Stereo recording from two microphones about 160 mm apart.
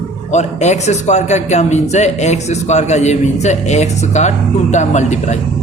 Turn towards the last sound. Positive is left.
turn(degrees=50)  # may be behind; listen again after turning